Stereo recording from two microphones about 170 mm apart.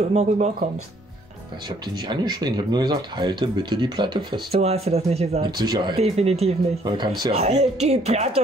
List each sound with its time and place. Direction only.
0.1 s speech: 40° right (ahead or behind)
2.0 s speech: 25° right (ahead or behind)
4.6 s speech: 35° right (ahead or behind)
5.6 s speech: 25° right (ahead or behind)
5.9 s speech: 35° right (ahead or behind)